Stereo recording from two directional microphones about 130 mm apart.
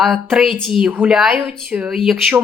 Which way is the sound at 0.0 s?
Centre (ahead or behind).